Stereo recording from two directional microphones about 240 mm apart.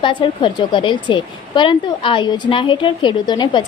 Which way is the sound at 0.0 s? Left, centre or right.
Centre.